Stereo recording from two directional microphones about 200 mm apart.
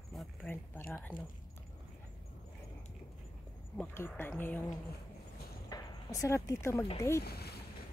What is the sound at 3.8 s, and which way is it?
Speech, 10° left (ahead or behind).